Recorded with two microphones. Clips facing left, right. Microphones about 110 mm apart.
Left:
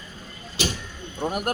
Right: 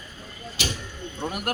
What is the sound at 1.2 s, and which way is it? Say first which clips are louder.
Speech: left 4 dB; 30° left (ahead or behind).